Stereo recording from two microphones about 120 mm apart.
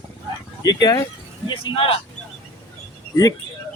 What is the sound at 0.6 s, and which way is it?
Speech, 35° left (ahead or behind).